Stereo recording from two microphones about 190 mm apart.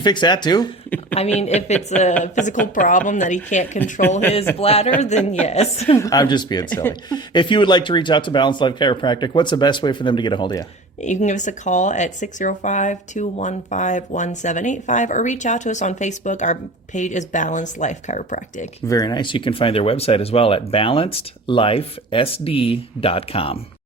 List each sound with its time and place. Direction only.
0.0 s speech: 25° left (ahead or behind)
1.4 s speech: 35° left (ahead or behind)
6.0 s speech: 20° left (ahead or behind)
11.0 s speech: 40° left (ahead or behind)
18.9 s speech: 20° left (ahead or behind)